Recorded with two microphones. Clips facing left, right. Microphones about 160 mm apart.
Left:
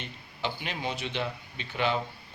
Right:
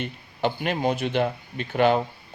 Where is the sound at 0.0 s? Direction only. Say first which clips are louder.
Right 9 dB; 50° right (ahead or behind).